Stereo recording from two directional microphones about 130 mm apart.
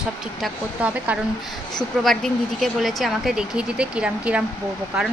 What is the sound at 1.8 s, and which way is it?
Speech, 5° left (ahead or behind).